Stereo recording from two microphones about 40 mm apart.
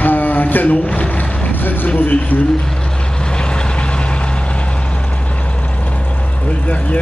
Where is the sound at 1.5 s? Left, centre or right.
Left.